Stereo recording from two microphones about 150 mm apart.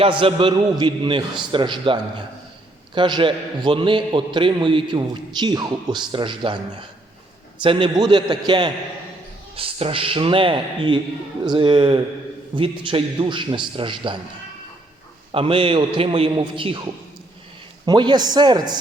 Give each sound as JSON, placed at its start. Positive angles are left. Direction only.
{"t": 0.0, "sound": "a man's voice", "side_deg": -35}
{"t": 7.6, "sound": "a man's voice", "side_deg": -35}
{"t": 15.3, "sound": "a man's voice", "side_deg": -35}
{"t": 16.3, "sound": "a man's voice", "side_deg": -25}